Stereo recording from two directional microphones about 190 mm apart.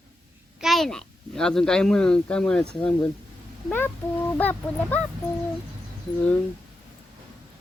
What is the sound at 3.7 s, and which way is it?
Cat, 10° left (ahead or behind).